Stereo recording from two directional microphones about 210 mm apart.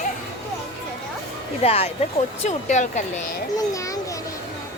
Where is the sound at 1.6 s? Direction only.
30° left (ahead or behind).